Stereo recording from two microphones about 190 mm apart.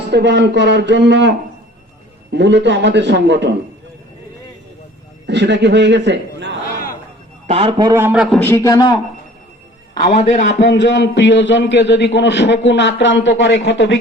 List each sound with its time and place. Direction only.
0.1 s speech: 65° right (ahead or behind)
2.3 s speech: 70° right (ahead or behind)
5.2 s a man's voice: 70° right (ahead or behind)
7.4 s a man's voice: 35° right (ahead or behind)
7.9 s a man's voice: 10° right (ahead or behind)
8.4 s a man's voice: 15° left (ahead or behind)
10.0 s a man's voice: 35° left (ahead or behind)
10.6 s a man's voice: 70° left (ahead or behind)